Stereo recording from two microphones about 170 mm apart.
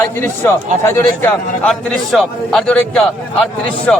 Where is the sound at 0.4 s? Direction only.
15° left (ahead or behind).